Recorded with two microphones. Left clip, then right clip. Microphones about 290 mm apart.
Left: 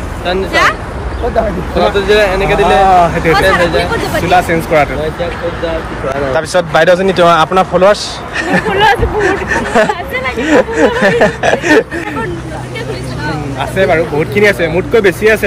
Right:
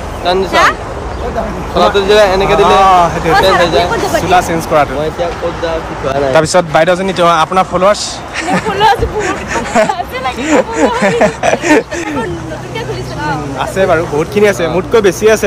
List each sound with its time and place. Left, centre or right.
0.2 s speech: centre
1.8 s speech: centre
4.3 s speech: centre
6.3 s speech: centre
13.6 s speech: centre